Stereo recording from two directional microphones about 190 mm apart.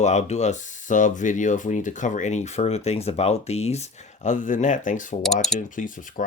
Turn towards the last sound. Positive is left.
turn(degrees=40)  # may be behind; listen again after turning